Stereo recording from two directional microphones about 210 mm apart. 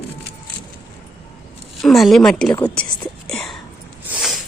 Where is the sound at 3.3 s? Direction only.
5° left (ahead or behind).